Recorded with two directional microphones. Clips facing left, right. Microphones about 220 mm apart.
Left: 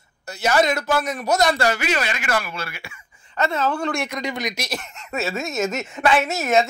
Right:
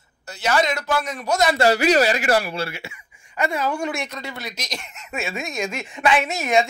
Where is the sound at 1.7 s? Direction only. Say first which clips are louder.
Right 7 dB; 35° right (ahead or behind).